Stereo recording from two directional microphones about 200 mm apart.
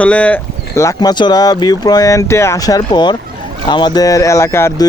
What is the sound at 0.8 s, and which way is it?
Speech, 15° left (ahead or behind).